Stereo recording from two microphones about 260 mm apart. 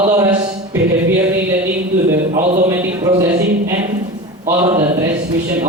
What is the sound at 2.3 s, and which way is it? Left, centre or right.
Speech, right.